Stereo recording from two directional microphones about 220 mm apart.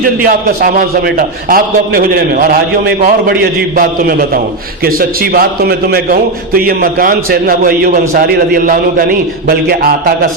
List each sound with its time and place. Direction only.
0.2 s a man's voice: 40° right (ahead or behind)
4.9 s a man's voice: 40° right (ahead or behind)